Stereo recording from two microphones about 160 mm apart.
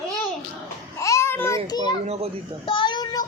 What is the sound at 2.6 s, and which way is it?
Child singing, 30° left (ahead or behind).